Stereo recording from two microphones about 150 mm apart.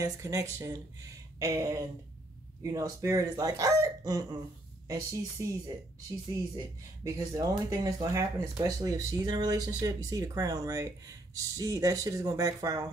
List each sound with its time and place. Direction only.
0.0 s speech: 20° right (ahead or behind)
7.1 s speech: 25° right (ahead or behind)